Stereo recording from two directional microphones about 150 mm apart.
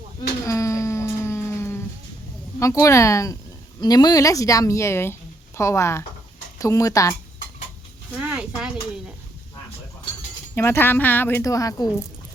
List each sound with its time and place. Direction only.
0.4 s a sound: 20° left (ahead or behind)
2.6 s a woman's voice: 20° left (ahead or behind)
8.1 s speech: 5° right (ahead or behind)
10.5 s speech: 15° left (ahead or behind)